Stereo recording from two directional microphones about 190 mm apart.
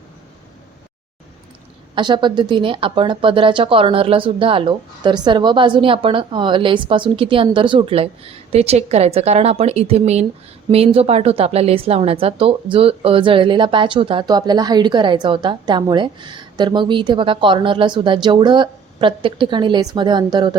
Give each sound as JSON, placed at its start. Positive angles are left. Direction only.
{"t": 2.0, "sound": "a woman's voice", "side_deg": -25}